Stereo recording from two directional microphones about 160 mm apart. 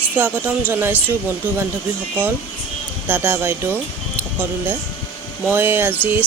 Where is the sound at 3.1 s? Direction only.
10° right (ahead or behind).